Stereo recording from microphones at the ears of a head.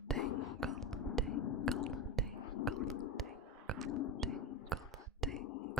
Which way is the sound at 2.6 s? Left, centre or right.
Left.